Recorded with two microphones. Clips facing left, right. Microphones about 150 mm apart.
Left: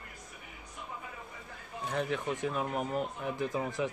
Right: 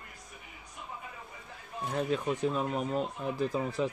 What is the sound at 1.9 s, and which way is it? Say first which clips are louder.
Speech: right 2 dB; 35° right (ahead or behind).